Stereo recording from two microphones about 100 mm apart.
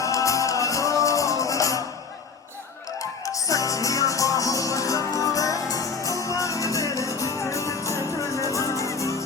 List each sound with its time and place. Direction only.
0.0 s music: 35° left (ahead or behind)
3.0 s music: 35° left (ahead or behind)